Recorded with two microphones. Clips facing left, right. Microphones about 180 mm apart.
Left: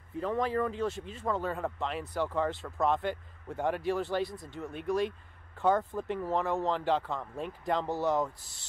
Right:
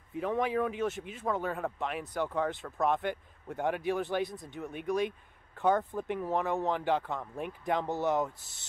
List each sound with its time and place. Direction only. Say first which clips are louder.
0.2 s speech: even; 10° right (ahead or behind)
1.2 s speech: even; centre (ahead or behind)
5.9 s speech: even; 10° right (ahead or behind)
6.5 s speech: left 1 dB; 15° right (ahead or behind)
7.9 s speech: left 1 dB; 20° right (ahead or behind)